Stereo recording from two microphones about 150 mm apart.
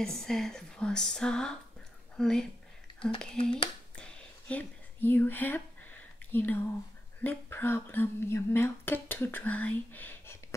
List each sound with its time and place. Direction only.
0.0 s a woman's voice: 5° left (ahead or behind)
3.9 s a sound: 5° left (ahead or behind)
6.3 s speech: 10° left (ahead or behind)